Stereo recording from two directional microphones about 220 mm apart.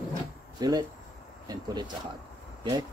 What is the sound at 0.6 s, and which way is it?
Speech, 20° right (ahead or behind).